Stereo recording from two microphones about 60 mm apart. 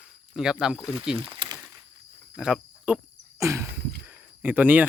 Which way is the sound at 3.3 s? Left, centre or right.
Right.